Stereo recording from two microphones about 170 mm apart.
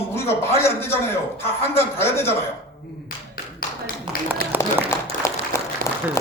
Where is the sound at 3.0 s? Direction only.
60° left (ahead or behind).